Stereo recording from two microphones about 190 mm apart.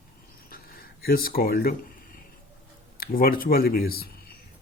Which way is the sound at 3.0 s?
50° left (ahead or behind).